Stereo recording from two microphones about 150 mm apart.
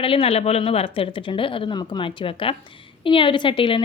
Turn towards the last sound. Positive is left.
turn(degrees=35)  # may be behind; listen again after turning